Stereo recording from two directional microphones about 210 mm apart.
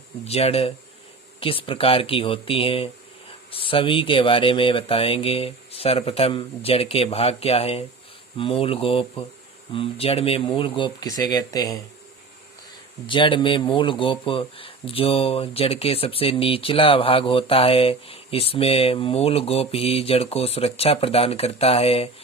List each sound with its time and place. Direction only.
0.3 s speech: 30° left (ahead or behind)
13.1 s speech: 25° left (ahead or behind)